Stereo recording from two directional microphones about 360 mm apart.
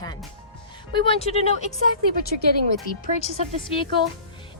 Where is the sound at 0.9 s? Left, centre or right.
Centre.